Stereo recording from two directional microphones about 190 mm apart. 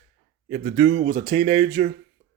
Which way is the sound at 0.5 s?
40° right (ahead or behind).